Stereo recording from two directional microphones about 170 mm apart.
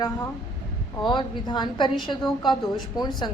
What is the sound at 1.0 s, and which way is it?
A woman's voice, 25° left (ahead or behind).